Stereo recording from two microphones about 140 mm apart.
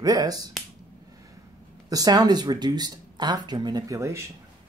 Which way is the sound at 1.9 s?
25° right (ahead or behind).